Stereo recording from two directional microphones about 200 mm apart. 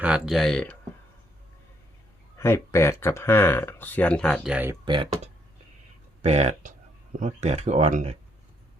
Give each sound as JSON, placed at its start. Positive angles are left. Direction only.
{"t": 0.0, "sound": "speech", "side_deg": -5}
{"t": 2.4, "sound": "speech", "side_deg": 10}
{"t": 4.5, "sound": "speech", "side_deg": -10}
{"t": 4.9, "sound": "speech", "side_deg": -25}